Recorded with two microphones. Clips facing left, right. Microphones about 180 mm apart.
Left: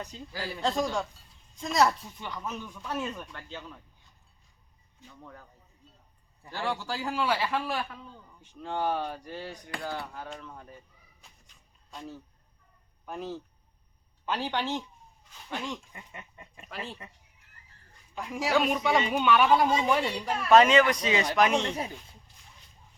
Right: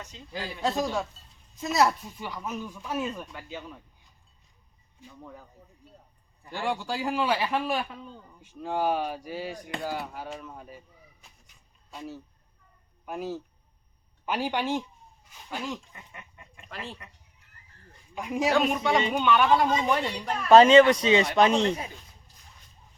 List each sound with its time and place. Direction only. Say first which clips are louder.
0.6 s a man's voice: right 1 dB; 5° right (ahead or behind)
4.9 s a man's voice: right 3 dB; 10° right (ahead or behind)
6.5 s a man's voice: right 2 dB; 15° right (ahead or behind)
10.0 s a sound: right 3 dB; 10° right (ahead or behind)
13.1 s a man's voice: right 3 dB; 10° right (ahead or behind)
18.1 s a woman's voice: right 5 dB; 20° right (ahead or behind)
18.5 s speech: left 1 dB; centre (ahead or behind)
20.5 s speech: right 5 dB; 30° right (ahead or behind)